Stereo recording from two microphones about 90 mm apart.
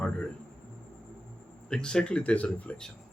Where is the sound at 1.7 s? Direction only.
10° left (ahead or behind).